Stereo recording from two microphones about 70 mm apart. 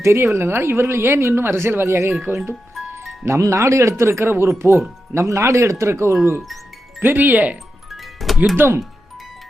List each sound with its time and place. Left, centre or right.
0.0 s speech: right
7.0 s speech: right
7.9 s music: centre
8.5 s speech: right